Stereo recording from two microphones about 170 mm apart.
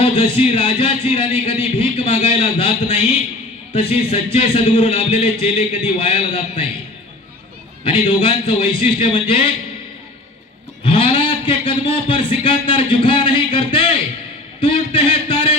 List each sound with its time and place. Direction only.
0.0 s speech: 35° left (ahead or behind)
7.9 s speech: 35° left (ahead or behind)
10.8 s a man's voice: 30° left (ahead or behind)